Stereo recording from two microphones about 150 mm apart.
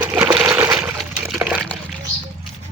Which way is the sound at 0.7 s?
Centre (ahead or behind).